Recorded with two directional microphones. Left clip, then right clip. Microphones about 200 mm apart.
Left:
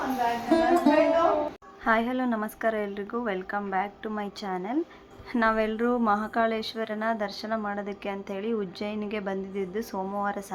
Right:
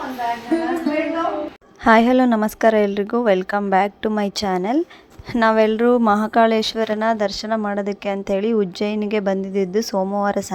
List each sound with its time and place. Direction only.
0.5 s music: centre (ahead or behind)
1.8 s a woman's voice: 50° right (ahead or behind)